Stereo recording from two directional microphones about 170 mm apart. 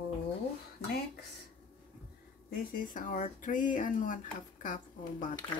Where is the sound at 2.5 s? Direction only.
55° left (ahead or behind).